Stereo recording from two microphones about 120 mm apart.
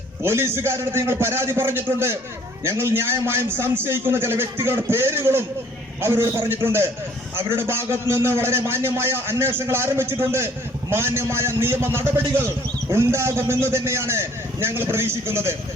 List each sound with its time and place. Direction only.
0.2 s a man's voice: 20° right (ahead or behind)